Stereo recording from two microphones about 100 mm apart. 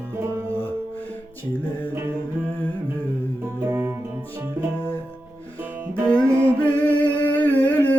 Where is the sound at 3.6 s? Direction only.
25° right (ahead or behind).